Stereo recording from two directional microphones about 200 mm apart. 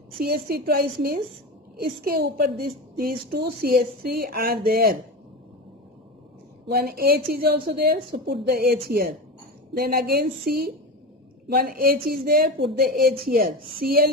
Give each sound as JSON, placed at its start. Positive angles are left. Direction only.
{"t": 0.2, "sound": "a woman's voice", "side_deg": -50}
{"t": 6.7, "sound": "a woman's voice", "side_deg": -50}